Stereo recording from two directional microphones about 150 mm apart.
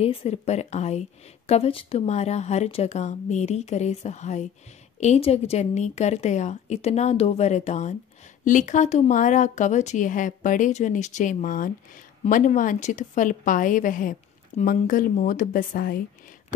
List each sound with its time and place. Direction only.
0.0 s a woman's voice: 40° left (ahead or behind); by 16.0 s 70° left (ahead or behind)